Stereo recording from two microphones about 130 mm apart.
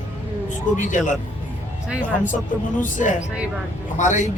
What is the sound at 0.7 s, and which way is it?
Speech, 75° left (ahead or behind).